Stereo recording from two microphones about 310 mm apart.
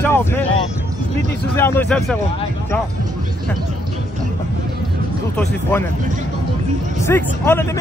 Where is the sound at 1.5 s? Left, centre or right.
Centre.